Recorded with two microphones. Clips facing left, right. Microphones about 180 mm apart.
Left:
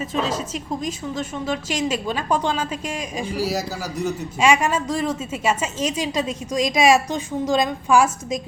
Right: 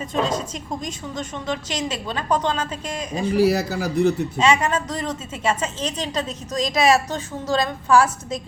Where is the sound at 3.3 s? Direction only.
60° right (ahead or behind).